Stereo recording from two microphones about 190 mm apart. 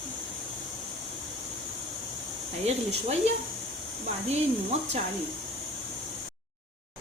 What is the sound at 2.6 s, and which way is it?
Speech, 35° right (ahead or behind).